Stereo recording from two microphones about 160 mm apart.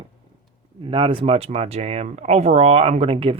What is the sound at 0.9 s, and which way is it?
Speech, 30° right (ahead or behind).